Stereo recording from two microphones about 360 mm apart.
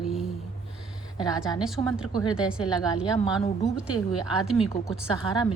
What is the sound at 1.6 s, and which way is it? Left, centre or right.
Speech, centre.